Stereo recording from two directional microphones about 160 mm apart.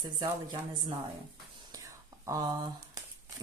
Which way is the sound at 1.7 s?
20° right (ahead or behind).